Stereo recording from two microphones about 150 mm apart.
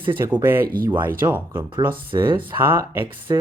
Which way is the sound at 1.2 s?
15° right (ahead or behind).